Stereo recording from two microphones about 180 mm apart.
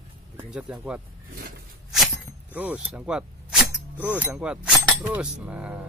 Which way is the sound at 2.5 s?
10° right (ahead or behind).